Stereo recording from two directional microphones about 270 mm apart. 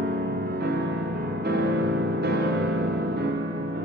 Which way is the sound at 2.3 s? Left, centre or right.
Right.